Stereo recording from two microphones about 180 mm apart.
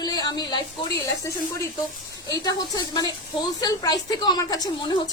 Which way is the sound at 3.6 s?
20° left (ahead or behind).